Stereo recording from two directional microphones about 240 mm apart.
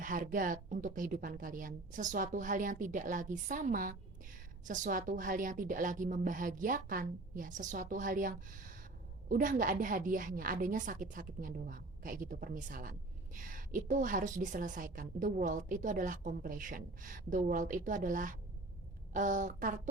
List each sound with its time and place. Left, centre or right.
0.0 s a woman's voice: right